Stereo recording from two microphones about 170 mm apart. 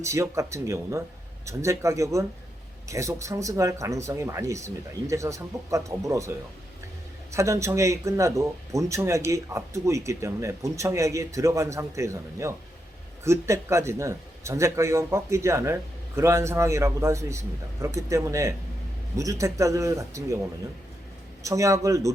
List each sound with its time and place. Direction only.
0.0 s speech: 15° right (ahead or behind)
7.3 s speech: 15° right (ahead or behind)
21.4 s a man's voice: 20° right (ahead or behind)